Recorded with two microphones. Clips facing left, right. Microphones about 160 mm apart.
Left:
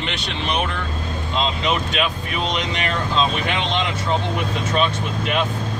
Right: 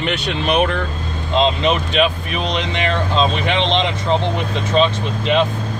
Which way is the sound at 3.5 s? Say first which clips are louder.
Right 5 dB; 25° right (ahead or behind).